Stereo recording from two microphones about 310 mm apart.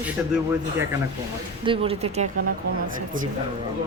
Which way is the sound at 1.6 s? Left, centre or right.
Centre.